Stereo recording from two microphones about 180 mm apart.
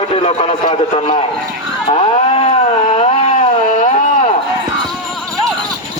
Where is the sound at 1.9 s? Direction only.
30° left (ahead or behind).